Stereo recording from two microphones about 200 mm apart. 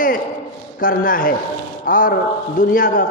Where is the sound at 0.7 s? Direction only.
45° left (ahead or behind).